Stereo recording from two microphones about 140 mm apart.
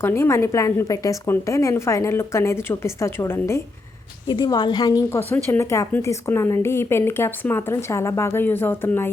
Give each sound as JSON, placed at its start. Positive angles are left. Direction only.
{"t": 0.0, "sound": "a woman's voice", "side_deg": 15}
{"t": 4.3, "sound": "a woman's voice", "side_deg": 30}